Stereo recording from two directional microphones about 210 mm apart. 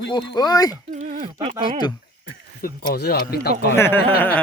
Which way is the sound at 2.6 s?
50° left (ahead or behind).